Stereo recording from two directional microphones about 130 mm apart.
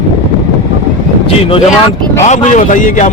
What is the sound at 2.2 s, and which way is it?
Speech, 65° left (ahead or behind).